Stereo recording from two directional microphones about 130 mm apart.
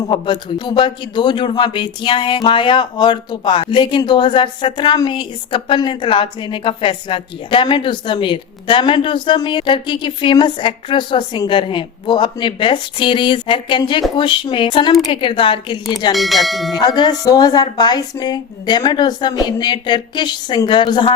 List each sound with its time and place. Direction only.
0.1 s speech: 35° left (ahead or behind)
16.1 s speech: centre (ahead or behind)
16.7 s speech: 35° left (ahead or behind)